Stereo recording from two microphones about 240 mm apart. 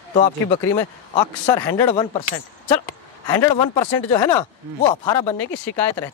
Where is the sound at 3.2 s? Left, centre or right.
Centre.